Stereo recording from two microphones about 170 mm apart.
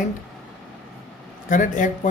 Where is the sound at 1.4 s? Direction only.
50° left (ahead or behind).